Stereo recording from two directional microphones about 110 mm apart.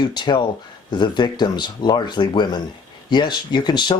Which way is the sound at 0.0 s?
40° left (ahead or behind).